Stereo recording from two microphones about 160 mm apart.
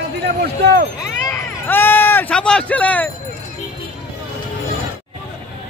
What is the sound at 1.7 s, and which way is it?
Speech, 15° left (ahead or behind).